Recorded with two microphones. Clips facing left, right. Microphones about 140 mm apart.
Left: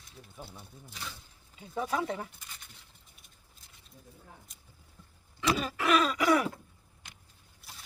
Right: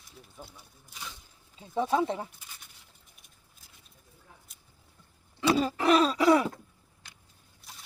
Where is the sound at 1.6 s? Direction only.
25° right (ahead or behind).